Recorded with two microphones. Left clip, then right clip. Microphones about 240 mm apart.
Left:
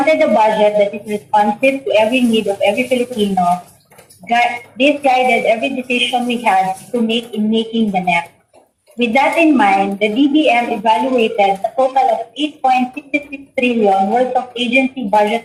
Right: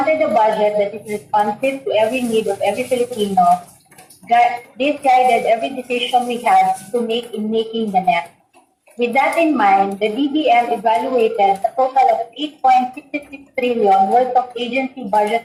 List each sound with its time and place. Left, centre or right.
0.0 s a woman's voice: left